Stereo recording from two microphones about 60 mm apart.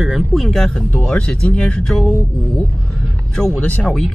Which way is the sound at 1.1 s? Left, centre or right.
Centre.